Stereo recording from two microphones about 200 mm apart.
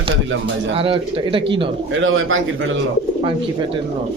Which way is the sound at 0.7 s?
25° right (ahead or behind).